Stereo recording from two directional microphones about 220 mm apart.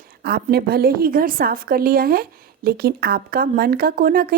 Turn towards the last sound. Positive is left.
turn(degrees=-40)  # may be behind; listen again after turning